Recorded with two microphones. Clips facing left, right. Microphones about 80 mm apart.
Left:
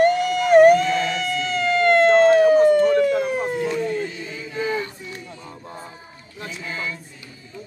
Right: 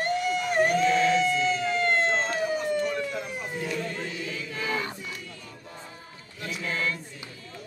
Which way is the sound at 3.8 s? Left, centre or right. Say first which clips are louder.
Left 7 dB; centre.